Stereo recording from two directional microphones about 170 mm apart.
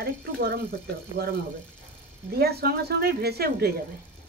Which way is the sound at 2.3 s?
70° right (ahead or behind).